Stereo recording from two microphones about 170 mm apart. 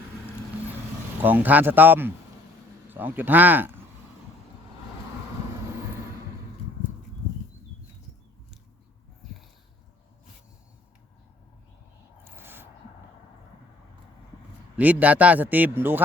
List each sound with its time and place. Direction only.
1.2 s a man's voice: 10° right (ahead or behind)
12.2 s a sound: 15° right (ahead or behind)
14.8 s a man's voice: 10° right (ahead or behind)